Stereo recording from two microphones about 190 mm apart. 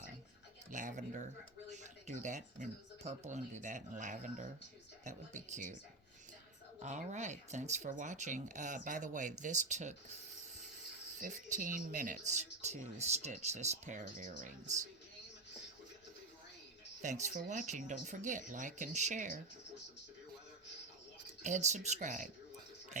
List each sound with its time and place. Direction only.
0.7 s speech: 40° right (ahead or behind)
6.8 s speech: 40° right (ahead or behind)
11.2 s speech: 45° right (ahead or behind)
17.0 s speech: 40° right (ahead or behind)
21.4 s speech: 40° right (ahead or behind)